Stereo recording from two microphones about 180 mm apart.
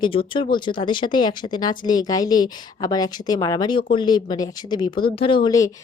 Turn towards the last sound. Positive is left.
turn(degrees=20)  # may be behind; listen again after turning